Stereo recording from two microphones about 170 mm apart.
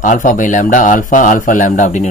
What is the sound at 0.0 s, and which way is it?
A man's voice, 50° left (ahead or behind).